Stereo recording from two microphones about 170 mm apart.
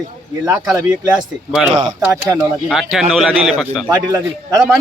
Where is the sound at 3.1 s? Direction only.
Centre (ahead or behind).